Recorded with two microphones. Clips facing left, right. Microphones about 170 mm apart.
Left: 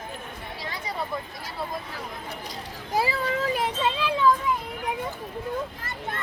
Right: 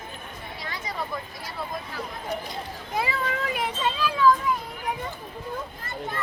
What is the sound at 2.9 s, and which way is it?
Children playing, 35° left (ahead or behind).